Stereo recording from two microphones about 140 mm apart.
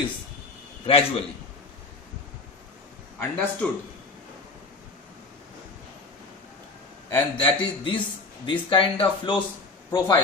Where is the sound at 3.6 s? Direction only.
10° left (ahead or behind).